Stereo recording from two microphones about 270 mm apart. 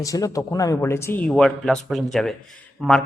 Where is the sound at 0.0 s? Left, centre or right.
Centre.